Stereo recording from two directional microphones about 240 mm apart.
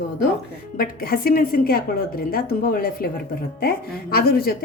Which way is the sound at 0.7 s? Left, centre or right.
Left.